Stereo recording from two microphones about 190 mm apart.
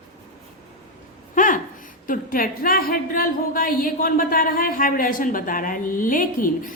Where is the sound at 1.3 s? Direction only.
45° left (ahead or behind).